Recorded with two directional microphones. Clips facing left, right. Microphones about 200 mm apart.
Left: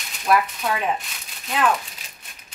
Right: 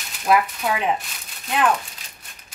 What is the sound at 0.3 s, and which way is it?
Speech, 15° right (ahead or behind).